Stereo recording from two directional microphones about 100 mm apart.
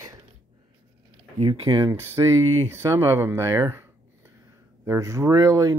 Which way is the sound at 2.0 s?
25° right (ahead or behind).